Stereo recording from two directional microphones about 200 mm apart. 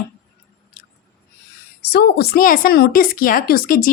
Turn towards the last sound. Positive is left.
turn(degrees=45)  # may be behind; listen again after turning